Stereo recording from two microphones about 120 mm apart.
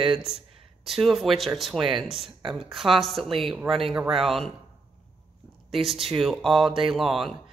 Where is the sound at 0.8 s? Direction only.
Centre (ahead or behind).